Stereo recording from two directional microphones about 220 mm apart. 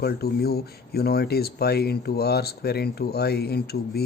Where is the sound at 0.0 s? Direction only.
45° left (ahead or behind).